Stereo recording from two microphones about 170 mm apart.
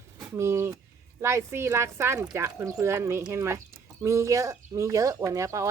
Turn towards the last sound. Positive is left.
turn(degrees=-20)  # may be behind; listen again after turning